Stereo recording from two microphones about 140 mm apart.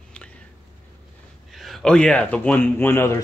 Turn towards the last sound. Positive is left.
turn(degrees=15)  # may be behind; listen again after turning